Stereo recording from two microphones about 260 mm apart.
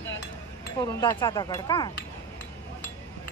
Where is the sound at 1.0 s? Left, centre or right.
Centre.